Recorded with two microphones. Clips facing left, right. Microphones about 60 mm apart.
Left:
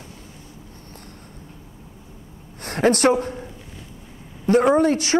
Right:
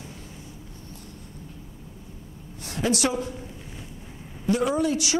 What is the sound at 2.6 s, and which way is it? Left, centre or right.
Speech, left.